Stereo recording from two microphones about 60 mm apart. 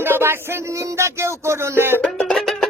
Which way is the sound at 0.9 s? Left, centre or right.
Right.